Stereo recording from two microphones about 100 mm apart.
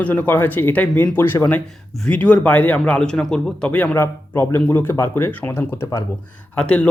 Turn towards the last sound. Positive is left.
turn(degrees=10)  # may be behind; listen again after turning